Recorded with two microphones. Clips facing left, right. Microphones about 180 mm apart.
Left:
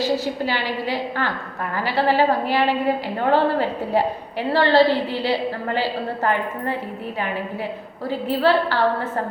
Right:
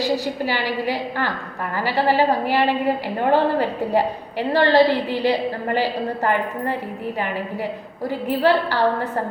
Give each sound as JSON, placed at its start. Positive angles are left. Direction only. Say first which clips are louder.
{"t": 0.0, "sound": "a woman's voice", "louder": "even", "side_deg": -15}
{"t": 8.3, "sound": "a woman's voice", "louder": "even", "side_deg": -15}